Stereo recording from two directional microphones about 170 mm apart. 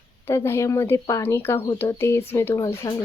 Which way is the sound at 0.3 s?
15° left (ahead or behind).